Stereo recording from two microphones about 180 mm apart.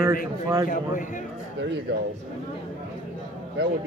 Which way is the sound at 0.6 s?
50° left (ahead or behind).